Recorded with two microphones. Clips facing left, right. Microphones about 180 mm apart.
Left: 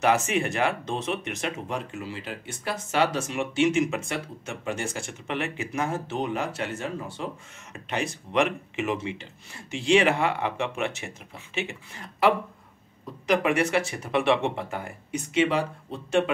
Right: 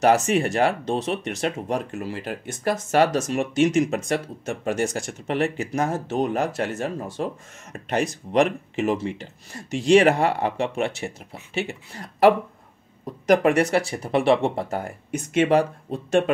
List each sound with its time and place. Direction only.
0.0 s speech: 40° right (ahead or behind)